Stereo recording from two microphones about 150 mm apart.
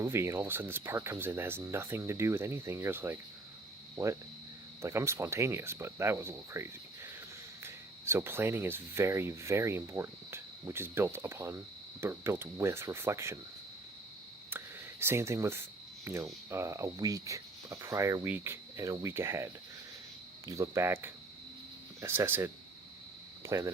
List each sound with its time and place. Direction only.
0.0 s speech: 15° right (ahead or behind)
14.5 s speech: 15° right (ahead or behind)
20.5 s speech: 20° right (ahead or behind)